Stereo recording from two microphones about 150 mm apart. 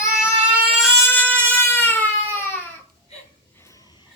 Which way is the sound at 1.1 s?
10° left (ahead or behind).